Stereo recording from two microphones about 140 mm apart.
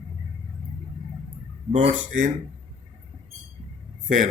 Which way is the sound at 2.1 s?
65° right (ahead or behind).